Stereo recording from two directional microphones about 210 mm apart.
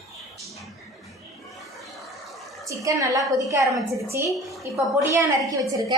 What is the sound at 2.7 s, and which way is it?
A woman's voice, 15° right (ahead or behind).